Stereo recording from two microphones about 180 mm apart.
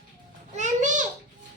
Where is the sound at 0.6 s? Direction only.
45° right (ahead or behind).